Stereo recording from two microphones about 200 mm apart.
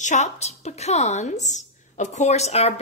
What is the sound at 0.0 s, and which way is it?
A woman's voice, 35° left (ahead or behind).